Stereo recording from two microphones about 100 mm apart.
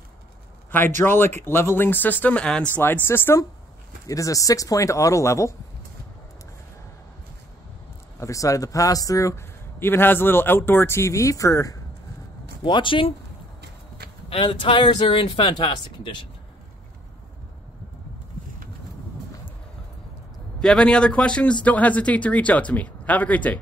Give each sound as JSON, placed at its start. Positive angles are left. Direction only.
{"t": 0.7, "sound": "speech", "side_deg": 20}
{"t": 4.1, "sound": "a man's voice", "side_deg": 35}
{"t": 8.2, "sound": "a man's voice", "side_deg": 35}
{"t": 12.6, "sound": "speech", "side_deg": 55}
{"t": 14.3, "sound": "speech", "side_deg": 60}
{"t": 20.6, "sound": "speech", "side_deg": 10}